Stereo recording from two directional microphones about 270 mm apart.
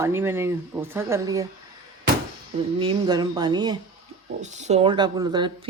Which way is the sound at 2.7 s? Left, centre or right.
Centre.